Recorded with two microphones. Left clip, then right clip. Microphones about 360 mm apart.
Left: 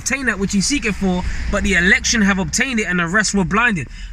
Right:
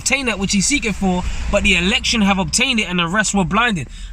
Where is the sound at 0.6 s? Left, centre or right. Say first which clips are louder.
Right 1 dB; centre.